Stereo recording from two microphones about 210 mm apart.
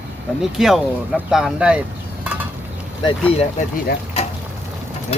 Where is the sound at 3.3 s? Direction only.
35° left (ahead or behind).